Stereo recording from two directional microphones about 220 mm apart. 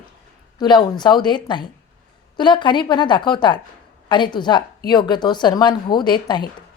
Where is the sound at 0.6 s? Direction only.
20° left (ahead or behind).